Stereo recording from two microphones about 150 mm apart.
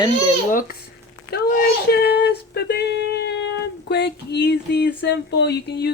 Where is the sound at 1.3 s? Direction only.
90° left.